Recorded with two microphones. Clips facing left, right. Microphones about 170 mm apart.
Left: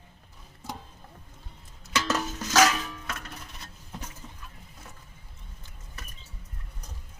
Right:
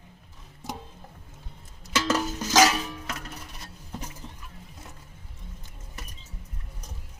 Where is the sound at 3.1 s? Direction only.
5° right (ahead or behind).